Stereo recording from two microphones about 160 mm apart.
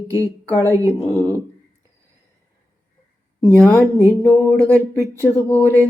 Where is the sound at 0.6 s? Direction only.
20° right (ahead or behind).